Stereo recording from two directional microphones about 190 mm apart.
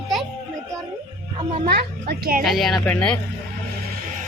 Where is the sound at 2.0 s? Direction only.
50° right (ahead or behind).